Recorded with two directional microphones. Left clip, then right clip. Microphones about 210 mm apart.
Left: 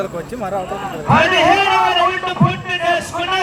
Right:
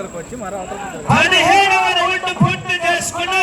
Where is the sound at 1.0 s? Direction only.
15° right (ahead or behind).